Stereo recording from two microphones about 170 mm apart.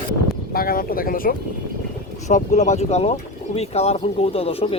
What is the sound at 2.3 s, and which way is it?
Speech, 45° left (ahead or behind).